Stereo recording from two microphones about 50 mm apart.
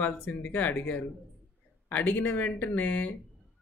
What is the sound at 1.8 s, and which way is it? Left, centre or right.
Speech, left.